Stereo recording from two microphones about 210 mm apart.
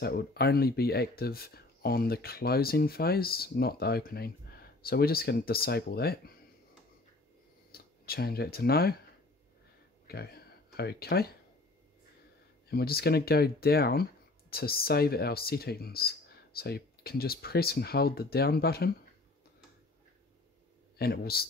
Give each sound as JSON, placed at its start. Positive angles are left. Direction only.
{"t": 0.0, "sound": "speech", "side_deg": 50}
{"t": 7.7, "sound": "speech", "side_deg": 45}
{"t": 10.0, "sound": "speech", "side_deg": 50}
{"t": 12.6, "sound": "speech", "side_deg": 50}
{"t": 21.0, "sound": "speech", "side_deg": 45}